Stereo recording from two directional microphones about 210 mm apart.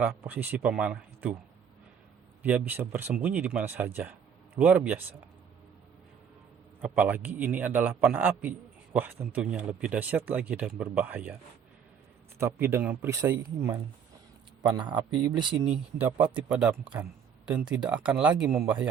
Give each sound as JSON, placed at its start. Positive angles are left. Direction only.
{"t": 0.3, "sound": "a man's voice", "side_deg": -10}
{"t": 2.4, "sound": "a man's voice", "side_deg": -5}
{"t": 6.8, "sound": "a man's voice", "side_deg": -10}
{"t": 12.4, "sound": "a man's voice", "side_deg": -10}
{"t": 14.6, "sound": "speech", "side_deg": -20}
{"t": 16.0, "sound": "a man's voice", "side_deg": -10}